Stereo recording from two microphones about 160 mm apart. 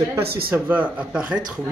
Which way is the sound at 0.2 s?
80° right.